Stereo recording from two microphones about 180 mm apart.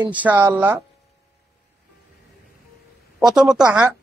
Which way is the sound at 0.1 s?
10° right (ahead or behind).